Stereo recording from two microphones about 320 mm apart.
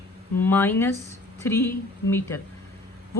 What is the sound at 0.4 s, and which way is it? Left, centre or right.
A woman's voice, centre.